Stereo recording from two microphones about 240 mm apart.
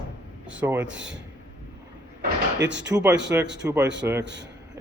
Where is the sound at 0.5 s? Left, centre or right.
Centre.